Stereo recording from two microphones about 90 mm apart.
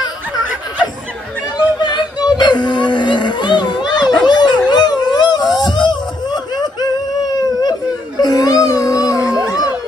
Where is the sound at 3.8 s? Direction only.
50° left (ahead or behind).